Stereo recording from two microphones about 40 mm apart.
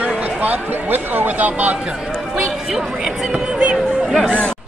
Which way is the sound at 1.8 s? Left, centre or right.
Centre.